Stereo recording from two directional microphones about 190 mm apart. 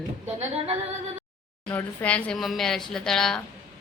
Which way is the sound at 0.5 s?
30° right (ahead or behind).